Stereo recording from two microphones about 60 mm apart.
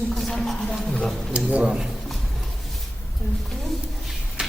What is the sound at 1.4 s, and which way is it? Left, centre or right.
Speech, centre.